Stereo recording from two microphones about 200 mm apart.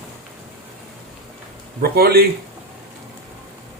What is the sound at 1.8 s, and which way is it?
Speech, 50° right (ahead or behind).